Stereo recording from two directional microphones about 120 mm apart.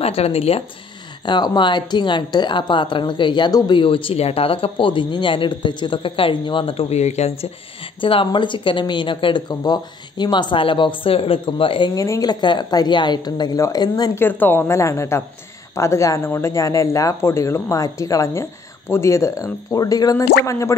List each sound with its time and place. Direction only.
0.0 s speech: 55° left (ahead or behind)
1.2 s a woman's voice: 40° left (ahead or behind); by 7.3 s 70° left (ahead or behind)
8.0 s a woman's voice: 45° left (ahead or behind)
11.9 s a woman's voice: 30° left (ahead or behind)
14.1 s speech: 20° left (ahead or behind)